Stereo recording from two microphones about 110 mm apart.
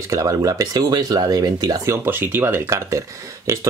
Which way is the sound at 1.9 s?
20° right (ahead or behind).